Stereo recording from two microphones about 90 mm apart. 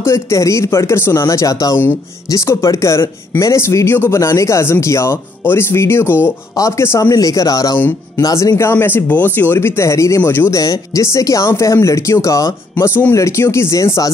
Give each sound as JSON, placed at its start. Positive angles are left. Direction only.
{"t": 0.0, "sound": "speech", "side_deg": 35}
{"t": 7.1, "sound": "speech", "side_deg": 40}
{"t": 8.5, "sound": "speech", "side_deg": 25}
{"t": 10.6, "sound": "speech", "side_deg": 40}